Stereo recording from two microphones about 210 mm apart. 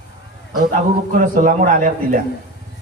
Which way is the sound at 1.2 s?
40° right (ahead or behind).